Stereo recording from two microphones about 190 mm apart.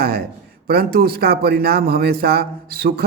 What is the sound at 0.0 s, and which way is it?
A man's voice, 50° right (ahead or behind).